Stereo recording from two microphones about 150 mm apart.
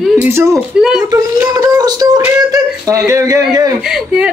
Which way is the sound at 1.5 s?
25° right (ahead or behind).